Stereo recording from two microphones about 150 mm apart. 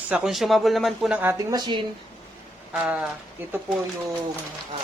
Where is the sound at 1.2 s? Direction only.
15° right (ahead or behind).